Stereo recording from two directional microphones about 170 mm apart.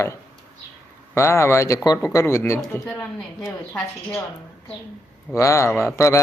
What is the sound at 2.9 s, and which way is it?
Speech, centre (ahead or behind).